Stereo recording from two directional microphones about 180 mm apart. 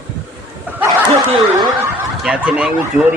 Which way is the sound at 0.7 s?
10° right (ahead or behind).